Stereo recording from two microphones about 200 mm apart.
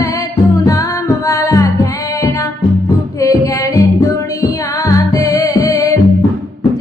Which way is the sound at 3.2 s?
15° left (ahead or behind).